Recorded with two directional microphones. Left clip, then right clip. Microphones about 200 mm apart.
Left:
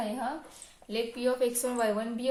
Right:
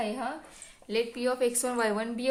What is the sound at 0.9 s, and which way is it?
A woman's voice, 45° right (ahead or behind).